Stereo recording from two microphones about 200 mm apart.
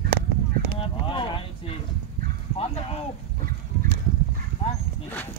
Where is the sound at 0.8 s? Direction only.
25° left (ahead or behind).